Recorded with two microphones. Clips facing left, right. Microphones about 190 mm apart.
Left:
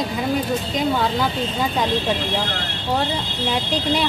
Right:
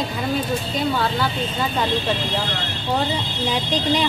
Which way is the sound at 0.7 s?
15° left (ahead or behind).